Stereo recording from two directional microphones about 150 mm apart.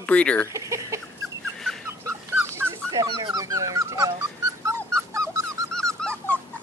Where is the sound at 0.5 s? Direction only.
20° right (ahead or behind).